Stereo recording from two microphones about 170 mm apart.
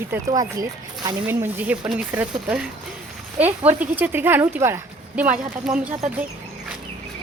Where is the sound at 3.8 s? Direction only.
10° right (ahead or behind).